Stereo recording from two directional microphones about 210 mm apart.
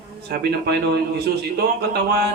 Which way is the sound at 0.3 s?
50° right (ahead or behind).